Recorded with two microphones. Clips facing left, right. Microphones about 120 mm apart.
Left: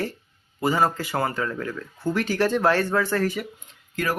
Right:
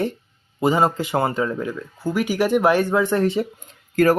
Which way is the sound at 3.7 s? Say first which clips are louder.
Right 11 dB; 45° right (ahead or behind).